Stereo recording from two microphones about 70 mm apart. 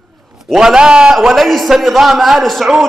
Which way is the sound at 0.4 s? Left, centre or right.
Centre.